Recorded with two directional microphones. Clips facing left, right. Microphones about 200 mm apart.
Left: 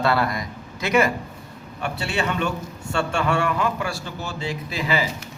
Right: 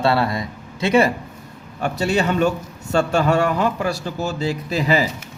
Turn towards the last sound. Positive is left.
turn(degrees=-40)  # may be behind; listen again after turning